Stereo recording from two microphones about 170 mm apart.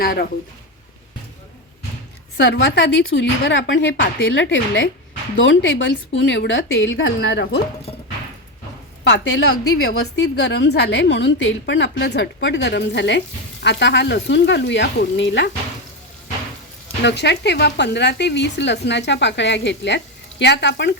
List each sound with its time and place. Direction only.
0.0 s speech: 60° left (ahead or behind)
2.4 s a woman's voice: 90° left
9.0 s a woman's voice: 90° left
17.0 s a woman's voice: 90° left